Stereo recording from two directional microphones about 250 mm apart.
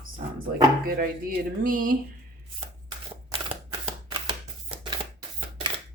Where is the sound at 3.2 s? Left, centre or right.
Right.